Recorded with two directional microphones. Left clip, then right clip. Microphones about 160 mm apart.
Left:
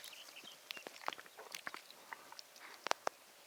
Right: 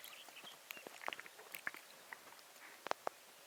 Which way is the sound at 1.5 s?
20° left (ahead or behind).